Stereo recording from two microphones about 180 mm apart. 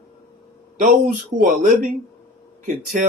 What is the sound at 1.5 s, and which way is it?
Speech, 45° right (ahead or behind).